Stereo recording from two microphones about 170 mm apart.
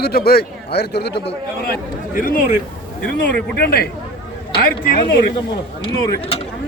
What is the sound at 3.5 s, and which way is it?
A man's voice, 65° left (ahead or behind).